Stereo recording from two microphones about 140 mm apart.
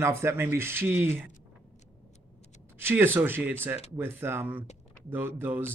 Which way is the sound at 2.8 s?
15° right (ahead or behind).